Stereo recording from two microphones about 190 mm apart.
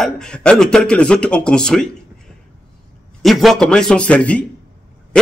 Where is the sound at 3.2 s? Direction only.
Centre (ahead or behind).